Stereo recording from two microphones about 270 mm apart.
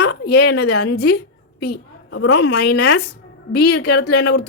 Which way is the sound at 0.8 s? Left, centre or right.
Left.